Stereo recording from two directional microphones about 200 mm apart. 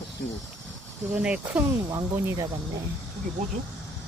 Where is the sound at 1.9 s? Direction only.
15° right (ahead or behind).